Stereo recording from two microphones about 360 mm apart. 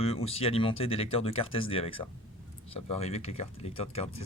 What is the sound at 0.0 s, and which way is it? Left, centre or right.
Speech, centre.